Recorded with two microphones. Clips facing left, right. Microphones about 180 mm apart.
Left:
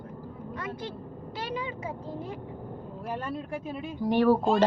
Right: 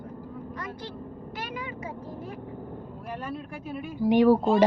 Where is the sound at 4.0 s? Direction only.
15° right (ahead or behind).